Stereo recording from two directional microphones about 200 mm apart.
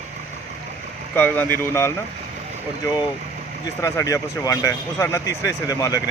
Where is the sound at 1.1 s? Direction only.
10° left (ahead or behind).